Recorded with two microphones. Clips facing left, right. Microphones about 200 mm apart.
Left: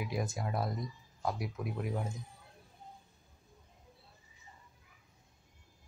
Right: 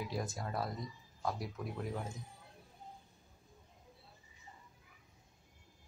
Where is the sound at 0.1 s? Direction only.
15° left (ahead or behind).